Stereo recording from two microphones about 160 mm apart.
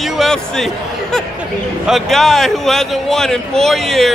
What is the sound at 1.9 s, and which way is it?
Speech, centre (ahead or behind).